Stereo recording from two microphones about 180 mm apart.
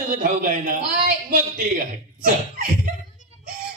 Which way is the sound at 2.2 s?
50° right (ahead or behind).